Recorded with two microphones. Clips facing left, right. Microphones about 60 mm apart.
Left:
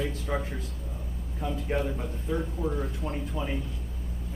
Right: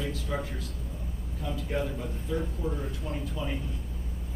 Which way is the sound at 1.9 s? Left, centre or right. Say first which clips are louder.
Left 1 dB; left.